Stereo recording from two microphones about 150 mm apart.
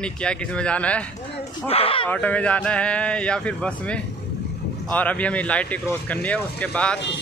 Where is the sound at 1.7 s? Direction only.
40° left (ahead or behind).